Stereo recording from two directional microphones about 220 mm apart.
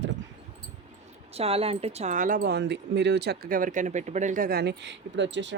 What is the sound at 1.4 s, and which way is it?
Speech, 25° right (ahead or behind).